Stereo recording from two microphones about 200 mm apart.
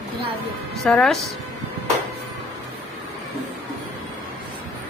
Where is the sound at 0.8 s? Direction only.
5° left (ahead or behind).